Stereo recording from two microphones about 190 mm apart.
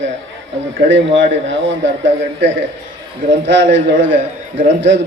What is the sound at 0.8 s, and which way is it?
A man's voice, 80° right.